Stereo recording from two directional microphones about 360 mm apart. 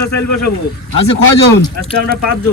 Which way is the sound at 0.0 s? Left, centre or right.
Left.